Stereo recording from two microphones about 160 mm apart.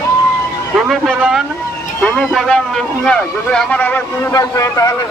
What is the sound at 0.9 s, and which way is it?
Vehicle, centre (ahead or behind).